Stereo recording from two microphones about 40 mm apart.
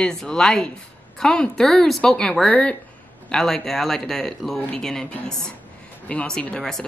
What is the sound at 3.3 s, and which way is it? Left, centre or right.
Speech, centre.